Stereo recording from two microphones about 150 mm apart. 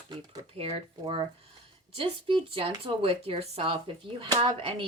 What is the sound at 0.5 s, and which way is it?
Speech, 40° right (ahead or behind).